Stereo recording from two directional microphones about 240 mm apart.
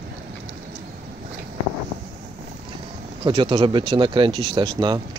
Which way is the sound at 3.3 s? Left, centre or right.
Right.